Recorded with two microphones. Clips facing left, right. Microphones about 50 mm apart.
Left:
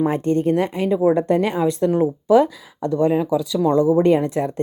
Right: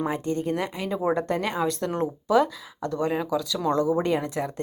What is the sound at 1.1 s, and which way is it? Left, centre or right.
Speech, left.